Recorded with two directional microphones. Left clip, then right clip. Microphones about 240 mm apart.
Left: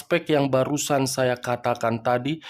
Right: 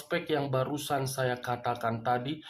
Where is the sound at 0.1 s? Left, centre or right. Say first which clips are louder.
Left 9 dB; left.